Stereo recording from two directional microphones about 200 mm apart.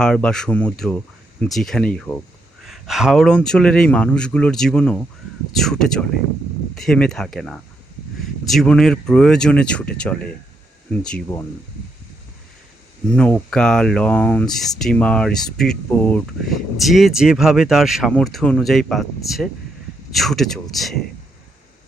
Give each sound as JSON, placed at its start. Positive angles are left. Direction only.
{"t": 0.0, "sound": "speech", "side_deg": 5}
{"t": 13.1, "sound": "speech", "side_deg": 5}